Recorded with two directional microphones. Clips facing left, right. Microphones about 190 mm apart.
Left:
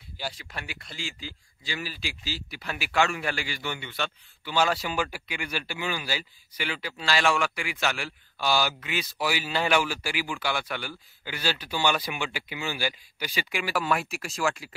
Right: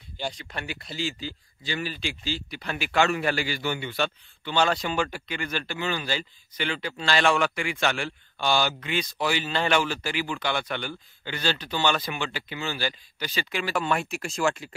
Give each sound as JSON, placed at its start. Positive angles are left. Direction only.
{"t": 0.2, "sound": "a man's voice", "side_deg": 5}
{"t": 0.9, "sound": "a man's voice", "side_deg": -35}
{"t": 1.6, "sound": "a man's voice", "side_deg": 5}
{"t": 3.0, "sound": "a man's voice", "side_deg": -35}
{"t": 4.5, "sound": "speech", "side_deg": 5}